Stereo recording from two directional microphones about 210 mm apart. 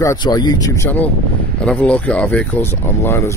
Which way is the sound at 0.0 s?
15° left (ahead or behind).